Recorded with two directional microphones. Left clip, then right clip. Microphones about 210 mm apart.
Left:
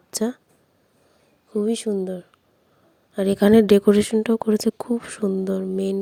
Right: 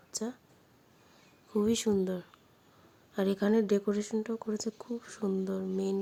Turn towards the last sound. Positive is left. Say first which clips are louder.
# left 9 dB
turn(degrees=35)  # may be behind; listen again after turning